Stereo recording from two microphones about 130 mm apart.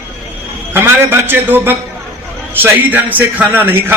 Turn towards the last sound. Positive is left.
turn(degrees=-15)  # may be behind; listen again after turning